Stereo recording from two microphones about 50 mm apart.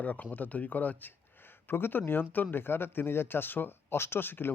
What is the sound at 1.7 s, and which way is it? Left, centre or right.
Speech, left.